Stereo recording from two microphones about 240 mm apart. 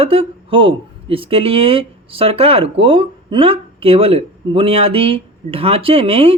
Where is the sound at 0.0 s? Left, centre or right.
Right.